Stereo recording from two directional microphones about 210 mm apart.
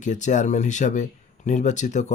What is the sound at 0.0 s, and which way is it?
Speech, 35° left (ahead or behind).